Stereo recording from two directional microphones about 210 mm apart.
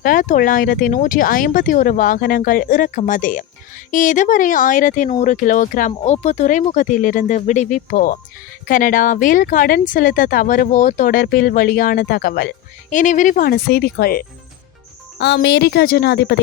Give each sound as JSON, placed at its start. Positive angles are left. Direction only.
{"t": 0.0, "sound": "speech", "side_deg": 40}
{"t": 12.9, "sound": "speech", "side_deg": 35}